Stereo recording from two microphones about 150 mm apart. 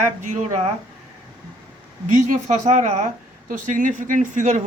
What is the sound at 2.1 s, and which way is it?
Speech, 55° right (ahead or behind).